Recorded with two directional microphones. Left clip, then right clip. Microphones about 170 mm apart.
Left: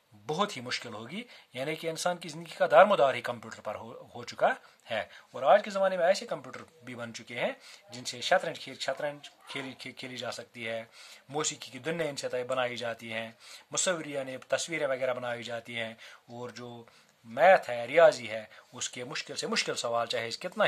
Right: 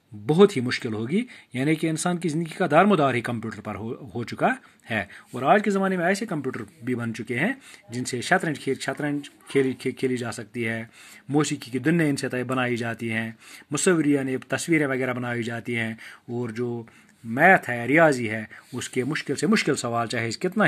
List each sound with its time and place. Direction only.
0.6 s speech: 15° right (ahead or behind)
16.3 s speech: 25° right (ahead or behind)